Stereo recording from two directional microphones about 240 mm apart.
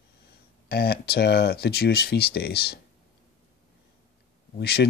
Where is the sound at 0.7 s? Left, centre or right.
Left.